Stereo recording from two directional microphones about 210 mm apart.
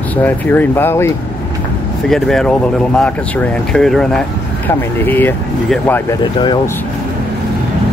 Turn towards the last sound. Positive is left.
turn(degrees=20)  # may be behind; listen again after turning